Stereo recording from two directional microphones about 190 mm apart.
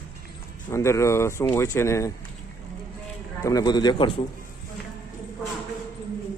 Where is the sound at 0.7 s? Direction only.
15° left (ahead or behind).